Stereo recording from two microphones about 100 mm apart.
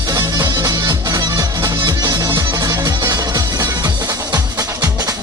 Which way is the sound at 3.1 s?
40° right (ahead or behind).